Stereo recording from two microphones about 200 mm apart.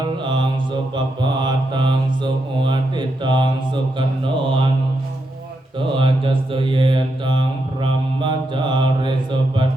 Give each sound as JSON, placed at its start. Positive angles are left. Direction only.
{"t": 0.0, "sound": "mantra", "side_deg": -25}
{"t": 5.9, "sound": "mantra", "side_deg": -25}